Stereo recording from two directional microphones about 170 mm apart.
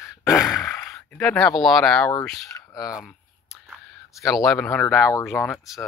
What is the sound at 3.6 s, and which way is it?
Speech, centre (ahead or behind).